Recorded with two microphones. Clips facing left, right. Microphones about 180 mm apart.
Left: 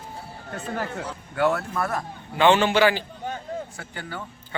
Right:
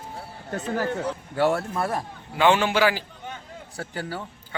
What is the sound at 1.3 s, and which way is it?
Speech, 30° right (ahead or behind).